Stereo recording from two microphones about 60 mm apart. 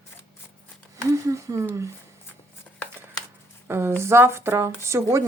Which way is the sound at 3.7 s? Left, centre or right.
Right.